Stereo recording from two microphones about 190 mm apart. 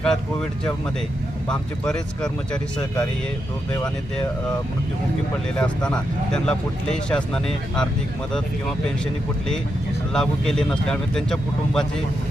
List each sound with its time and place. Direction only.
0.0 s speech: 5° left (ahead or behind)
5.5 s speech: 5° left (ahead or behind)
10.1 s speech: 5° left (ahead or behind)